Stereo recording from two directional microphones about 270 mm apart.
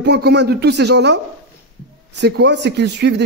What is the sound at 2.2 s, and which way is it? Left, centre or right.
A man's voice, right.